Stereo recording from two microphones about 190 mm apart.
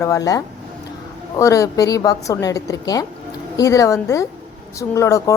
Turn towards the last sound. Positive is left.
turn(degrees=15)  # may be behind; listen again after turning